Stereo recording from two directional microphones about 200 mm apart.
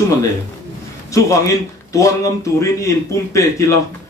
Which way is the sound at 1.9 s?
15° left (ahead or behind).